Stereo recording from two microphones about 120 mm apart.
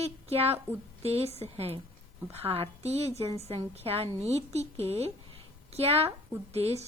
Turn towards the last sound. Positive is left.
turn(degrees=-60)  # may be behind; listen again after turning